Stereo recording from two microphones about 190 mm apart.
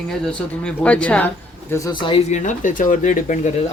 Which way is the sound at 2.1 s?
40° left (ahead or behind).